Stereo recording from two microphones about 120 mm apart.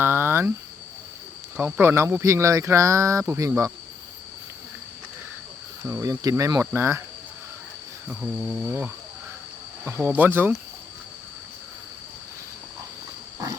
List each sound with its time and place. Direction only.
0.0 s cricket: 20° right (ahead or behind)
1.8 s speech: 20° right (ahead or behind)
5.8 s speech: 25° right (ahead or behind)
8.0 s insect: 10° right (ahead or behind)